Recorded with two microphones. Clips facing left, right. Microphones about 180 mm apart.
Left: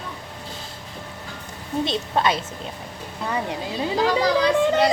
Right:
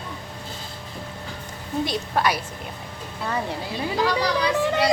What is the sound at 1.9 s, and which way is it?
Speech, 25° left (ahead or behind).